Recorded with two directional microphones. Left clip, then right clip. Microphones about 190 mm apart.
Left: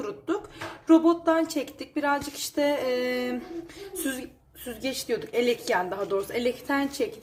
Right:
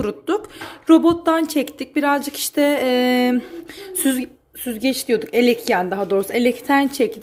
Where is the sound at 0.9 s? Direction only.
45° right (ahead or behind).